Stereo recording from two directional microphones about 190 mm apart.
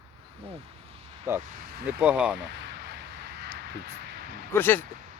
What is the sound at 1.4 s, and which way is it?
Speech, 50° right (ahead or behind).